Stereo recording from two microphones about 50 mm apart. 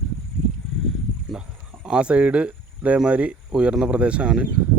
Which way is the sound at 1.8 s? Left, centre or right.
Centre.